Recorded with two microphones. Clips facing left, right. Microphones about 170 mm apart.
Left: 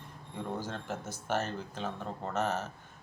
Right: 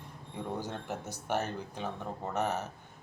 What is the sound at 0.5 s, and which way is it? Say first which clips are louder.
Speech: even; 15° right (ahead or behind).